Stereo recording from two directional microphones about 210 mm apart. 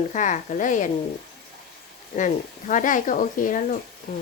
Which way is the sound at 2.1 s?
40° left (ahead or behind).